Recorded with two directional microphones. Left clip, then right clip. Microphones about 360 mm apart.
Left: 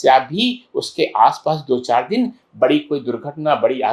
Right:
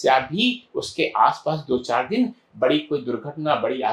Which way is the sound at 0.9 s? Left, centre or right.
Centre.